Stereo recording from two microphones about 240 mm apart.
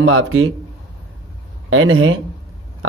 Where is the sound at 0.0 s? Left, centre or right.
Right.